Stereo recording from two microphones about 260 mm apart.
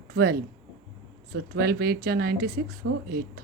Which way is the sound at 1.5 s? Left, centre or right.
Right.